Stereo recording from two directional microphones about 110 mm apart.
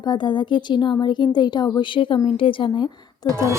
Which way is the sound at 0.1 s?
50° left (ahead or behind).